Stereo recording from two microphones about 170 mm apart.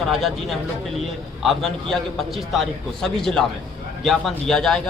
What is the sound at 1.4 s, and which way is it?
Speech, centre (ahead or behind).